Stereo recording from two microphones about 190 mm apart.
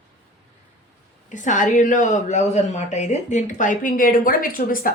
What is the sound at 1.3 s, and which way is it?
Speech, 40° left (ahead or behind).